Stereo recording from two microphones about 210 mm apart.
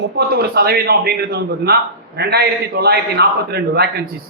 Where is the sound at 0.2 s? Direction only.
50° right (ahead or behind).